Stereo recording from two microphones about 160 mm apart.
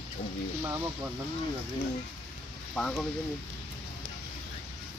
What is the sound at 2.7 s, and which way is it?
Speech, 5° left (ahead or behind).